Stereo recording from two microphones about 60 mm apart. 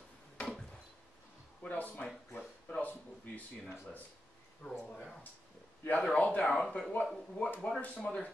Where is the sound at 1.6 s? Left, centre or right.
Left.